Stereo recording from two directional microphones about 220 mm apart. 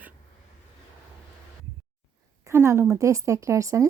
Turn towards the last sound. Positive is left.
turn(degrees=-15)  # may be behind; listen again after turning